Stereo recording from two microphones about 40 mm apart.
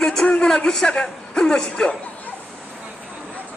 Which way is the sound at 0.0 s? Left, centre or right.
Centre.